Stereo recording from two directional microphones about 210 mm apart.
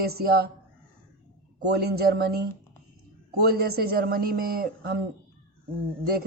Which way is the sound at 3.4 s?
45° right (ahead or behind).